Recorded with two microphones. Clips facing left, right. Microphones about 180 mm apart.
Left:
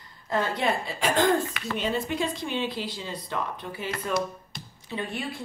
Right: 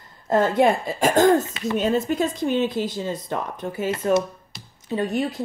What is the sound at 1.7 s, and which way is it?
Speech, 45° right (ahead or behind).